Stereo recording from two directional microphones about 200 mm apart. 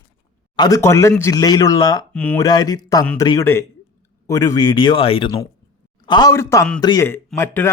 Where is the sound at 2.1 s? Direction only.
5° left (ahead or behind).